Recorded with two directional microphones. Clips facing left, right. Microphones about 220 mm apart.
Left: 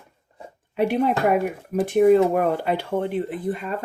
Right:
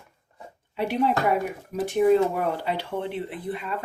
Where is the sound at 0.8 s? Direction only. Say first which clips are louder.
Left 4 dB; 50° left (ahead or behind).